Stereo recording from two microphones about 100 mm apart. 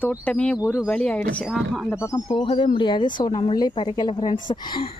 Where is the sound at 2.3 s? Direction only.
60° left (ahead or behind).